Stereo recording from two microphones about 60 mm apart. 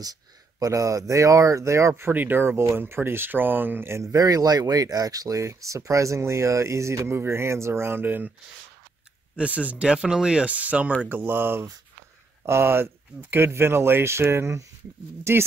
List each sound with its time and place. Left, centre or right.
0.0 s speech: right
2.1 s speech: right
4.0 s speech: right
9.4 s speech: right